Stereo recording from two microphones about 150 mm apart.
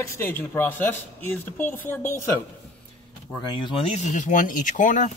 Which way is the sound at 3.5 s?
30° left (ahead or behind).